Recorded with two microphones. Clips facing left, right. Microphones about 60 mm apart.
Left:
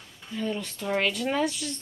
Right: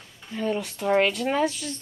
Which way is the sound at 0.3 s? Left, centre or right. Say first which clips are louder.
Right 3 dB; right.